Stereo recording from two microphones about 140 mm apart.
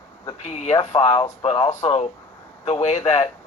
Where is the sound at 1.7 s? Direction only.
50° left (ahead or behind).